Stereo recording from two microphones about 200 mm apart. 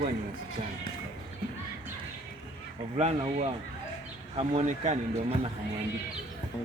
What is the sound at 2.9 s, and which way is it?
Speech, 30° right (ahead or behind).